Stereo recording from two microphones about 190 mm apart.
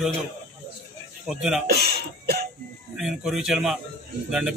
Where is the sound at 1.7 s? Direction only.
55° right (ahead or behind).